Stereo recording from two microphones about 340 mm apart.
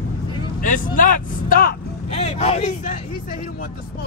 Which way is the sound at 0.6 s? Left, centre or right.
Left.